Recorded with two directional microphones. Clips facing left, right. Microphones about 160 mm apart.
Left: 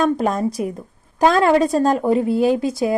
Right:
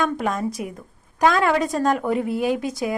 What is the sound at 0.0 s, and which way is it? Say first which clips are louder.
A woman's voice: left 5 dB; 35° left (ahead or behind).